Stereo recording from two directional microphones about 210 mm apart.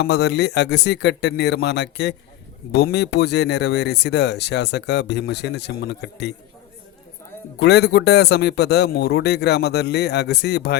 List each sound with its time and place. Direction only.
0.0 s speech: 55° left (ahead or behind)
7.6 s speech: 50° left (ahead or behind)